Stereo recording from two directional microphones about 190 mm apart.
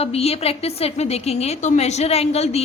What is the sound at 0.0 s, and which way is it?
A woman's voice, 30° left (ahead or behind).